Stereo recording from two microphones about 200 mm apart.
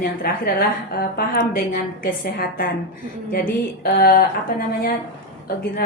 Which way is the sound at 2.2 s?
45° left (ahead or behind).